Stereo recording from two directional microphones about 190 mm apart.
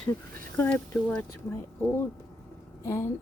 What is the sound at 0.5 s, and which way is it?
Speech, 5° left (ahead or behind).